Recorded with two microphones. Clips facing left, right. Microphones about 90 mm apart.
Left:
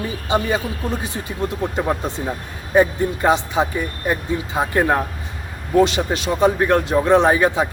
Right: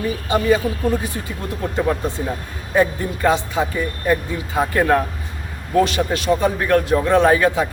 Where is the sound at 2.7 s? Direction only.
20° left (ahead or behind).